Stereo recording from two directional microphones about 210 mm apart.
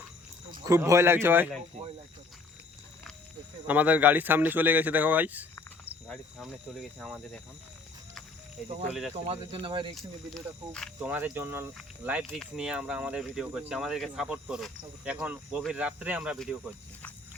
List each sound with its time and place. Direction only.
0.5 s speech: 15° right (ahead or behind)
3.7 s speech: 5° right (ahead or behind)
7.0 s speech: centre (ahead or behind)
8.9 s speech: centre (ahead or behind)
9.2 s speech: 25° right (ahead or behind)
9.9 s speech: centre (ahead or behind)
11.1 s speech: 10° right (ahead or behind)